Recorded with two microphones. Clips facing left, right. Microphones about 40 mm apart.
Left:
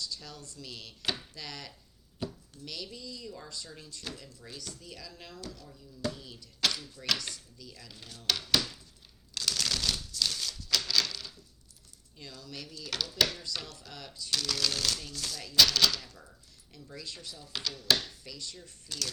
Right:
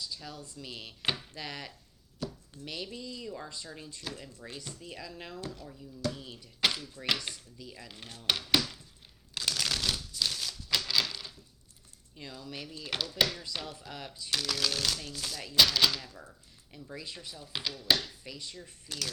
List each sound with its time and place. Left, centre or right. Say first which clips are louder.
0.0 s speech: even; centre
9.3 s a sound: even; centre
12.1 s speech: right 2 dB; centre